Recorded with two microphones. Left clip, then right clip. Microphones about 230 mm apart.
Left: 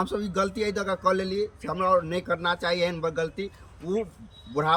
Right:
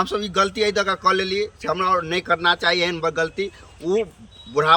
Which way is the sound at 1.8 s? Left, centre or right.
Right.